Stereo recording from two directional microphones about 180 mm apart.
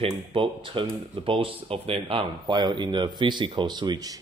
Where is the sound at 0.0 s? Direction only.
30° right (ahead or behind).